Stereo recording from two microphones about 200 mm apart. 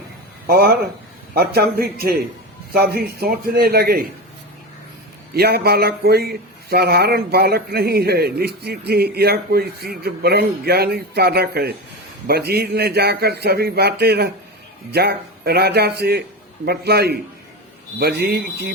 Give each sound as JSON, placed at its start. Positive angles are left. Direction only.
{"t": 0.4, "sound": "speech", "side_deg": -50}
{"t": 5.3, "sound": "speech", "side_deg": -50}